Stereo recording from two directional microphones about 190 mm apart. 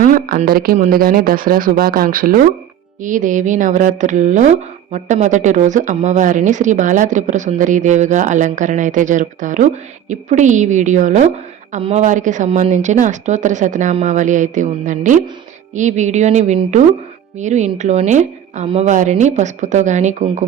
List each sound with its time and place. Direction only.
0.0 s speech: 45° right (ahead or behind)